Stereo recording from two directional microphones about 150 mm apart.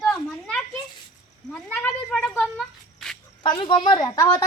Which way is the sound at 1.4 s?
5° left (ahead or behind).